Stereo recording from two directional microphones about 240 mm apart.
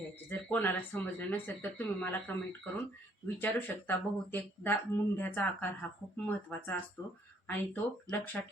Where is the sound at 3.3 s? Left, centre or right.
Centre.